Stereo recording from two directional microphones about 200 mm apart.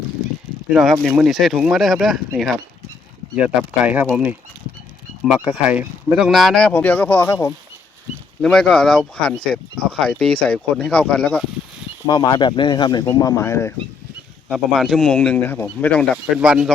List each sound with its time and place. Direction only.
0.7 s speech: centre (ahead or behind)
3.8 s speech: 10° right (ahead or behind); by 7.3 s 10° left (ahead or behind)
8.4 s speech: 5° left (ahead or behind)
12.0 s speech: 20° left (ahead or behind)
14.5 s speech: centre (ahead or behind)
16.1 s speech: 5° right (ahead or behind)